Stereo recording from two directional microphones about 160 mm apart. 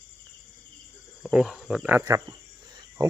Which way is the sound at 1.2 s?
5° right (ahead or behind).